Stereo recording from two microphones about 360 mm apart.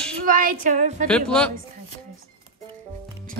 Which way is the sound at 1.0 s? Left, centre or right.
Centre.